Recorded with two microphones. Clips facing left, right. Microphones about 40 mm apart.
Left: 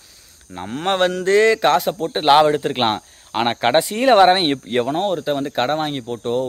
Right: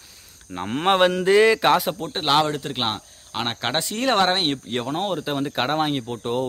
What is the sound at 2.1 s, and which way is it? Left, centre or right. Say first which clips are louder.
Speech: left 7 dB; centre.